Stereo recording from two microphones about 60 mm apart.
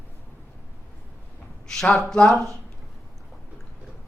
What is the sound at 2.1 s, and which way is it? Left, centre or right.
Speech, centre.